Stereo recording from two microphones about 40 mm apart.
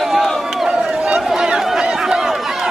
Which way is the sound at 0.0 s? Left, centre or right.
Centre.